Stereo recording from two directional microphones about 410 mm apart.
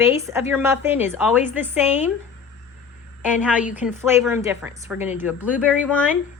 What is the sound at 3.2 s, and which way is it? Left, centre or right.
A woman's voice, centre.